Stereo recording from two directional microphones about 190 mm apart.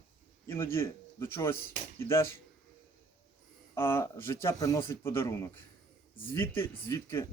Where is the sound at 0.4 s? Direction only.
15° left (ahead or behind).